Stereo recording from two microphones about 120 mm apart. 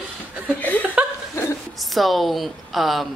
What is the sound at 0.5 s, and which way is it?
Speech, 15° left (ahead or behind).